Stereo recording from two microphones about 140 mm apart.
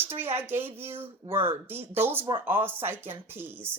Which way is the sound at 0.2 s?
15° right (ahead or behind).